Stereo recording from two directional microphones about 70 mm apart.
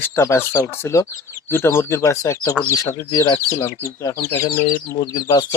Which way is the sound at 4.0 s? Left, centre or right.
Left.